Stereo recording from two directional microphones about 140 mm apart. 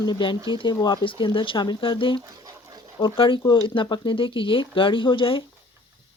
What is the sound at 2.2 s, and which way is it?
Dog, 25° right (ahead or behind).